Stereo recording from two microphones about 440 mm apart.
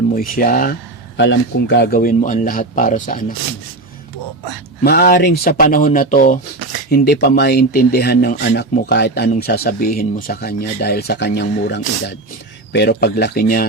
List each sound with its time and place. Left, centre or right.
0.1 s speech: centre
4.8 s speech: left